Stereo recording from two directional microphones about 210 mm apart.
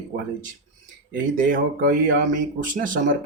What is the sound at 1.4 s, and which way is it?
Speech, 40° right (ahead or behind).